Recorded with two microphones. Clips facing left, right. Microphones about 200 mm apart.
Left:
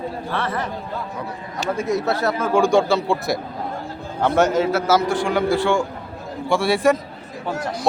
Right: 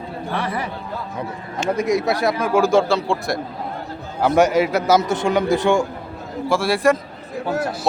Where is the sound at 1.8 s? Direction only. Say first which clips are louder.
Right 2 dB; 15° right (ahead or behind).